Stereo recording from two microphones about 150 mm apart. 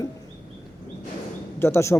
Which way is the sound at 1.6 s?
15° left (ahead or behind).